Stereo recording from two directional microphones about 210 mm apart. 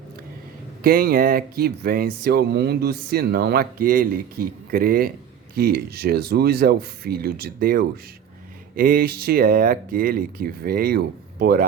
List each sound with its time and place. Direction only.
0.8 s speech: 45° right (ahead or behind)